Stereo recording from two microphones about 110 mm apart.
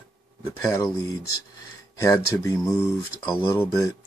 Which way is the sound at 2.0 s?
25° left (ahead or behind).